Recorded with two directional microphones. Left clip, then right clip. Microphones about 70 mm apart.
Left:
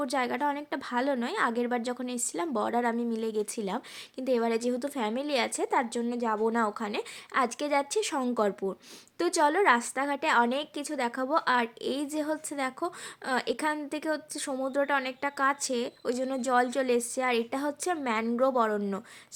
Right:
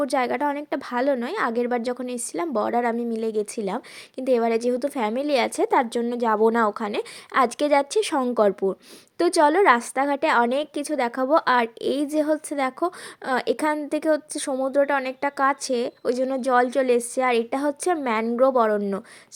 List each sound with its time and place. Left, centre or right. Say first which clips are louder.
0.0 s a woman's voice: right 6 dB; centre
4.2 s a woman's voice: right 7 dB; right
6.7 s a woman's voice: right 7 dB; right
7.3 s a woman's voice: right 8 dB; right
14.5 s a woman's voice: right 7 dB; centre
15.0 s a woman's voice: right 6 dB; right